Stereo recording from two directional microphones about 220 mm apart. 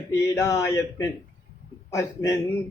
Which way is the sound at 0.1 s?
15° left (ahead or behind).